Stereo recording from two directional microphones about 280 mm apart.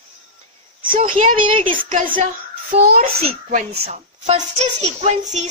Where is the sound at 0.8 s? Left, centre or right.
Centre.